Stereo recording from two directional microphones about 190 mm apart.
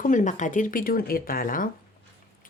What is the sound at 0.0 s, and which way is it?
Speech, 40° left (ahead or behind).